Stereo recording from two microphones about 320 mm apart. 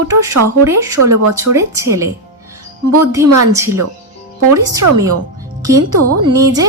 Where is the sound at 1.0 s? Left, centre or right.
Right.